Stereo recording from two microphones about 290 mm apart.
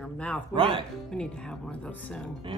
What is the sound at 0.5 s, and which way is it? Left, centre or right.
Speech, centre.